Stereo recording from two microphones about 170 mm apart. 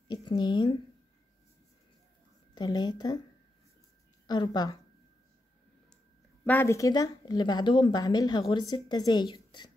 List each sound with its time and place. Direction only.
0.1 s a woman's voice: 25° left (ahead or behind)
2.5 s a woman's voice: 25° left (ahead or behind)
4.3 s a woman's voice: 25° left (ahead or behind)
6.4 s a woman's voice: 10° left (ahead or behind)